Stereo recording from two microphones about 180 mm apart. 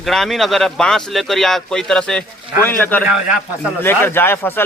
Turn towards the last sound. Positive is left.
turn(degrees=10)  # may be behind; listen again after turning